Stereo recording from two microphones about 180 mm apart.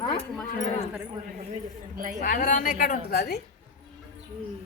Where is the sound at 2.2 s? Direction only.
50° left (ahead or behind).